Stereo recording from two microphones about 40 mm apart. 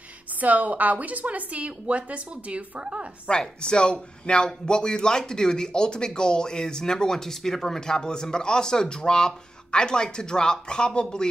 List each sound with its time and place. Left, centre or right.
0.4 s a woman's voice: right
3.3 s speech: left